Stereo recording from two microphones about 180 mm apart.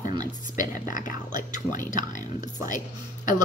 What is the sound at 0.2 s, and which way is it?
Speech, 45° left (ahead or behind).